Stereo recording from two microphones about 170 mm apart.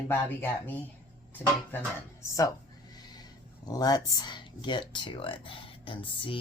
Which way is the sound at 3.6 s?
20° left (ahead or behind).